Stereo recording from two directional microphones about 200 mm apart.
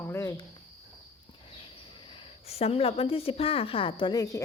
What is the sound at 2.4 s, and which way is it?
A woman's voice, 30° left (ahead or behind).